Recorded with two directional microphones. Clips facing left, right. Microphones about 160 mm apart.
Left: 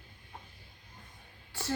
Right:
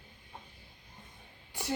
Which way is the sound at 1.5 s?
15° right (ahead or behind).